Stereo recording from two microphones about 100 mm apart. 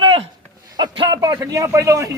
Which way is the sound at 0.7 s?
45° right (ahead or behind).